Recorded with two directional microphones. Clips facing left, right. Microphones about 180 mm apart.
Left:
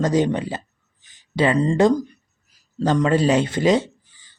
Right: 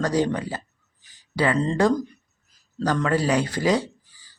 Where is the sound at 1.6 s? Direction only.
15° left (ahead or behind).